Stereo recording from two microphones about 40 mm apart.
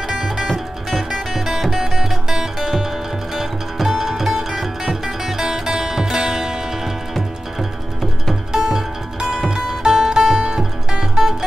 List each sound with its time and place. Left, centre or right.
0.5 s music: centre
8.5 s music: centre